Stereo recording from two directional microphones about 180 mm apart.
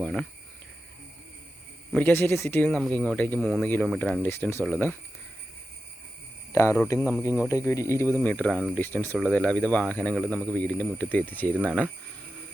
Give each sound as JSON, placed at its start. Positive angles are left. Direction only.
{"t": 0.0, "sound": "speech", "side_deg": 5}
{"t": 1.9, "sound": "speech", "side_deg": 10}
{"t": 6.5, "sound": "speech", "side_deg": 15}